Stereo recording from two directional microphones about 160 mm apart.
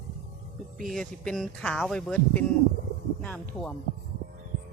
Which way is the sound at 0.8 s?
Centre (ahead or behind).